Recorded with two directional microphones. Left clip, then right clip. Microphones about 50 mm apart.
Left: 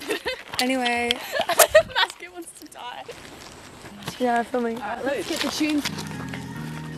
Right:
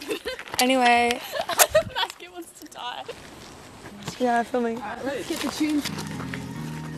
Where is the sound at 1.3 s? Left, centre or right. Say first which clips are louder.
Left 7 dB; left.